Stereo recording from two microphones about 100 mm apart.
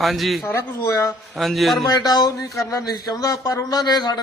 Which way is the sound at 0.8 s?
30° left (ahead or behind).